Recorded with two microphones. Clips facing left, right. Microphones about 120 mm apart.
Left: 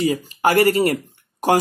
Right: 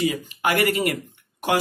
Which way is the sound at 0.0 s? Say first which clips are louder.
Left 5 dB; 35° left (ahead or behind).